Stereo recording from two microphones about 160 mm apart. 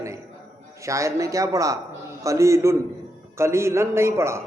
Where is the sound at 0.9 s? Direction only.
20° right (ahead or behind).